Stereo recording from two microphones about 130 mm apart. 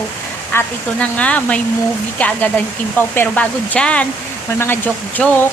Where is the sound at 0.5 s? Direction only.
10° left (ahead or behind).